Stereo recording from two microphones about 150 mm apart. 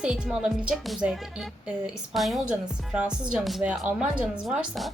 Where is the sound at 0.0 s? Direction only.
5° right (ahead or behind).